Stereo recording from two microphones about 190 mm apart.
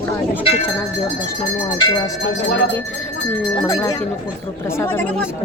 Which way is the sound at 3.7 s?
15° left (ahead or behind).